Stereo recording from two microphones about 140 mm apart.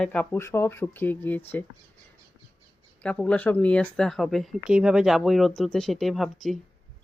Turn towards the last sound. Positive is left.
turn(degrees=0)  # may be behind; listen again after turning